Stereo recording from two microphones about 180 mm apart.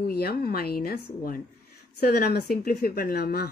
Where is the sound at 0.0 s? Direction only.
60° left (ahead or behind).